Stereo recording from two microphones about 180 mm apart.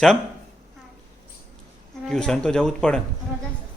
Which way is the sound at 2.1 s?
5° left (ahead or behind).